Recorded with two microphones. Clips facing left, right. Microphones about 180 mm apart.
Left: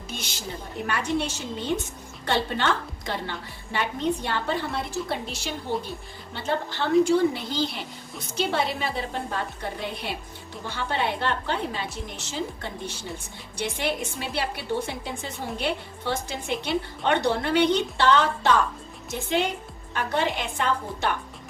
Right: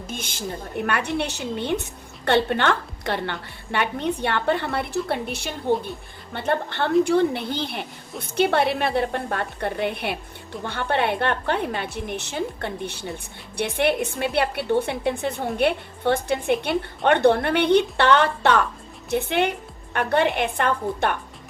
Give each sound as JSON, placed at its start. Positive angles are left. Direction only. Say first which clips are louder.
{"t": 0.1, "sound": "a woman's voice", "louder": "right 4 dB", "side_deg": -50}